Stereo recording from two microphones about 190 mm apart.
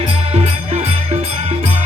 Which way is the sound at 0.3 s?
30° right (ahead or behind).